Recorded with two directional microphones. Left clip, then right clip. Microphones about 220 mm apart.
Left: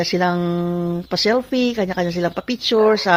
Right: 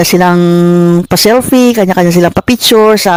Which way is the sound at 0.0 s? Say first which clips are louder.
Right 11 dB; 45° right (ahead or behind).